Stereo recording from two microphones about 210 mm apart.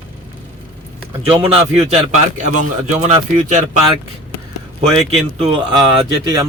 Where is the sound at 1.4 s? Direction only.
25° right (ahead or behind).